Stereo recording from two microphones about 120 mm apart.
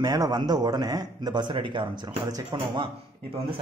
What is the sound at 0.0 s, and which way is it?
A man's voice, 35° right (ahead or behind).